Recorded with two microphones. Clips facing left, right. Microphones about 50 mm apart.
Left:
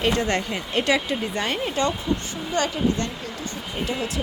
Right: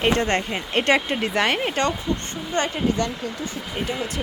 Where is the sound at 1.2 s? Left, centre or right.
Right.